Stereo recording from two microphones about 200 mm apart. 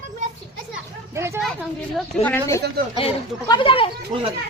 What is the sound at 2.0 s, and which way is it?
A woman's voice, 10° left (ahead or behind).